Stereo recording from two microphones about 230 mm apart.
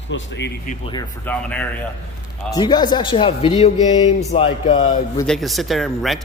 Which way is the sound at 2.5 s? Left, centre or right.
Centre.